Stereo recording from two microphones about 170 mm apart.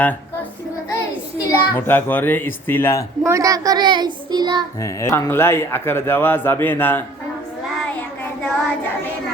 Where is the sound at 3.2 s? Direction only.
20° right (ahead or behind).